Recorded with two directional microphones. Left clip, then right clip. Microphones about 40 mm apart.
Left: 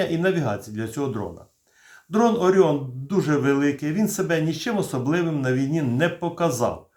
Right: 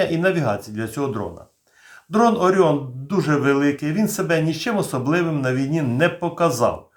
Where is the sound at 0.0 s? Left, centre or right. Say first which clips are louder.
Right 3 dB; right.